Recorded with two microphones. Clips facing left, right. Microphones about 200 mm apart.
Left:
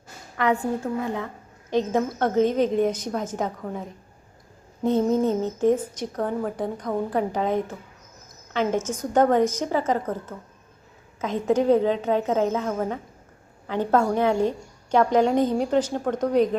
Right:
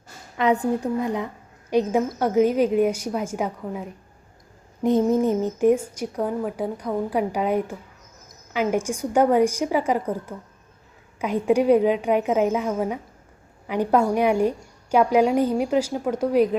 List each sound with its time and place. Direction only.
0.3 s a woman's voice: 20° right (ahead or behind)